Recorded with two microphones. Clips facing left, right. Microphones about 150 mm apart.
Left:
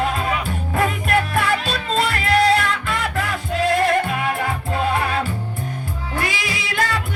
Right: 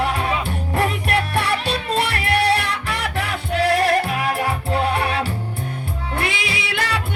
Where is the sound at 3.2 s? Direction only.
75° right (ahead or behind).